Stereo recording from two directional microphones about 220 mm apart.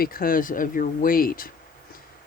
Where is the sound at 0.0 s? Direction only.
40° left (ahead or behind).